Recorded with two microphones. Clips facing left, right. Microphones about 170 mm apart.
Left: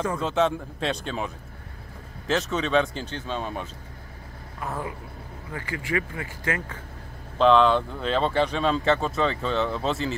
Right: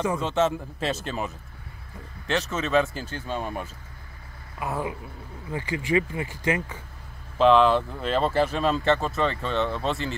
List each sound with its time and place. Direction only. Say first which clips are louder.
0.0 s speech: even; 5° right (ahead or behind)
7.3 s speech: even; 5° right (ahead or behind)